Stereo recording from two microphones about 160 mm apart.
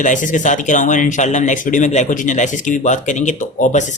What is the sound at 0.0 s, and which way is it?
Speech, 50° left (ahead or behind).